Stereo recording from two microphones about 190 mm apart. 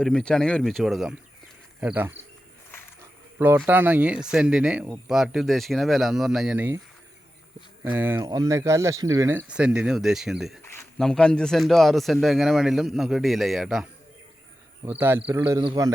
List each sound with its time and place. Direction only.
0.0 s speech: 5° left (ahead or behind)
3.3 s speech: 15° right (ahead or behind)
7.9 s speech: 10° right (ahead or behind)
9.5 s speech: 5° right (ahead or behind)
14.8 s speech: 10° right (ahead or behind)